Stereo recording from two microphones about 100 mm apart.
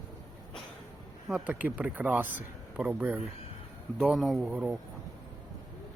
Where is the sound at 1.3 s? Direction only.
15° right (ahead or behind).